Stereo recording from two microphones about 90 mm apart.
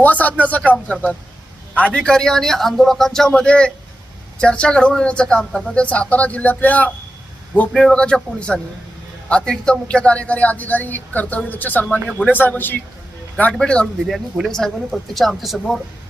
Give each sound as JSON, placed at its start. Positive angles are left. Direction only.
{"t": 0.0, "sound": "a man's voice", "side_deg": 20}
{"t": 7.7, "sound": "a man's voice", "side_deg": 5}